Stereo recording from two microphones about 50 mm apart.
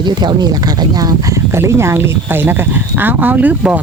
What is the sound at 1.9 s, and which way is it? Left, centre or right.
Speech, right.